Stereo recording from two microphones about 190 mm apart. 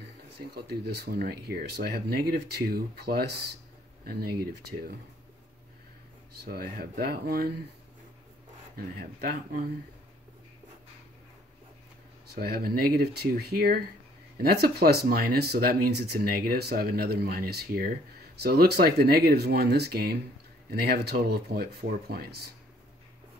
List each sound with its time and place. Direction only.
0.4 s speech: 55° right (ahead or behind)
6.4 s speech: 55° right (ahead or behind)
8.7 s speech: 50° right (ahead or behind)
12.4 s speech: 50° right (ahead or behind)